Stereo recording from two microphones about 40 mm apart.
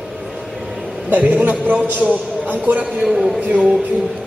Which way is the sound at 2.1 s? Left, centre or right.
Right.